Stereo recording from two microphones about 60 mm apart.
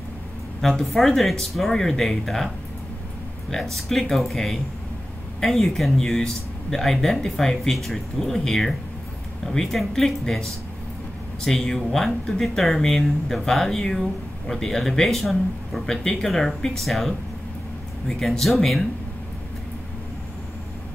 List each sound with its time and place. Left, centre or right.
0.6 s speech: centre
3.7 s speech: centre